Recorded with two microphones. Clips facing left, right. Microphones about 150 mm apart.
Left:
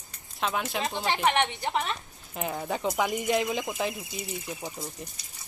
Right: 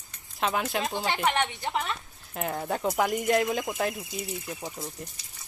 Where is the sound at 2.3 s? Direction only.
Centre (ahead or behind).